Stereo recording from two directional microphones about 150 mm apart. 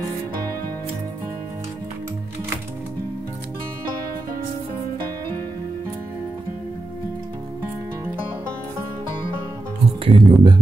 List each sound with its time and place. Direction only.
10.0 s music: 30° right (ahead or behind)